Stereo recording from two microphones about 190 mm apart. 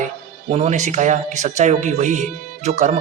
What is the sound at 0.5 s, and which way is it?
Speech, 40° right (ahead or behind).